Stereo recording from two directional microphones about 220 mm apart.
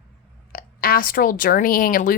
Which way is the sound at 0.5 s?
40° left (ahead or behind).